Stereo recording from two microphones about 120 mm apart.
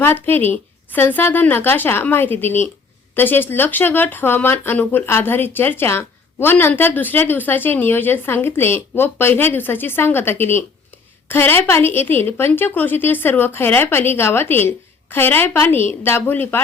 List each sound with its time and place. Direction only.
0.0 s a woman's voice: 20° left (ahead or behind)